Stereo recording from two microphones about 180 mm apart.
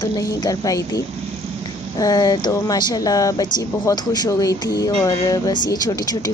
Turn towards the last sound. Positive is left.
turn(degrees=20)  # may be behind; listen again after turning